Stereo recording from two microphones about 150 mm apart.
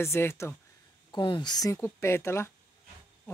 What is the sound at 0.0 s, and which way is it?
Speech, 15° left (ahead or behind).